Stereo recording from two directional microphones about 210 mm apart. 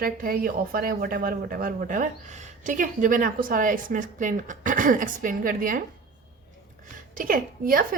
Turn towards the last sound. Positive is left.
turn(degrees=-40)  # may be behind; listen again after turning